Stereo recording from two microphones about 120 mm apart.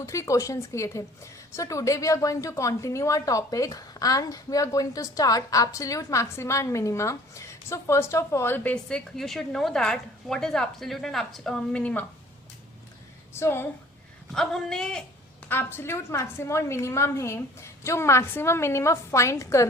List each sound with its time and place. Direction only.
0.0 s a woman's voice: 25° left (ahead or behind)
13.3 s a woman's voice: 20° left (ahead or behind)
14.3 s speech: 5° left (ahead or behind)
15.4 s a woman's voice: 20° left (ahead or behind)